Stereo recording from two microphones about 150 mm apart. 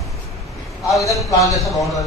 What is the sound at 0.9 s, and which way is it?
Speech, centre (ahead or behind).